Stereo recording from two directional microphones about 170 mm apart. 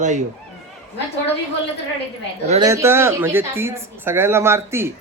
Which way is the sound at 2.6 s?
15° right (ahead or behind).